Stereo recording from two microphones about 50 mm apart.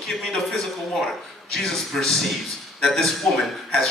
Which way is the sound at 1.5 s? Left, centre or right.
Centre.